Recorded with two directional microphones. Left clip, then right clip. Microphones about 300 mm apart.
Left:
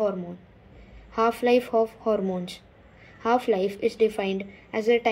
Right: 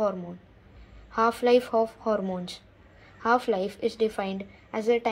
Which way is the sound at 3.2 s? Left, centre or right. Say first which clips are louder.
Left 1 dB; centre.